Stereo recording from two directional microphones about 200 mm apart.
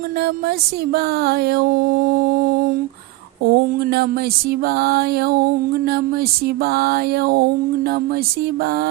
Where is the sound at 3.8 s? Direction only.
50° right (ahead or behind).